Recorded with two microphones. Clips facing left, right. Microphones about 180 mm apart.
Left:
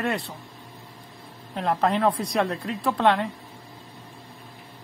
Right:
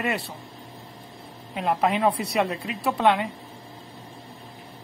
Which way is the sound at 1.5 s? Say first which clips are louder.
Even; 10° right (ahead or behind).